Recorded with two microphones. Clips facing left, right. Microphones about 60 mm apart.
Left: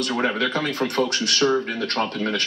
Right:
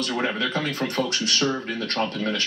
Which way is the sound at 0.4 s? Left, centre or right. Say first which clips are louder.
Left 3 dB; left.